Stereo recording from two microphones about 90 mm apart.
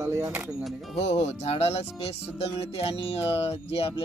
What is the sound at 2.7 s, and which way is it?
Speech, 90° left.